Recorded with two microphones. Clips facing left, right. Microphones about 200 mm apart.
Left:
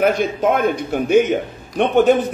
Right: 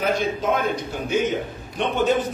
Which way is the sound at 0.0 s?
55° left (ahead or behind).